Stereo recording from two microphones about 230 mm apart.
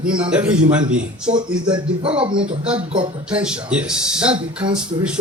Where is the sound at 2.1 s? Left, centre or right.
Right.